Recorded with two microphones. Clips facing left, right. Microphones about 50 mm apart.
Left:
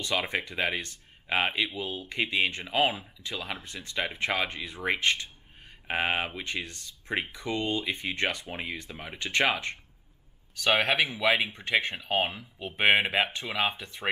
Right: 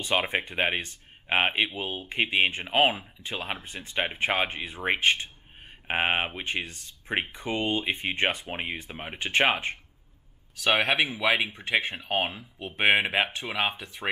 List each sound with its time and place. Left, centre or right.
0.0 s speech: right
10.6 s speech: centre
13.4 s speech: centre